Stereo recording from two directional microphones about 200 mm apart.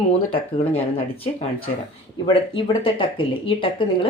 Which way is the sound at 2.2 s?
25° left (ahead or behind).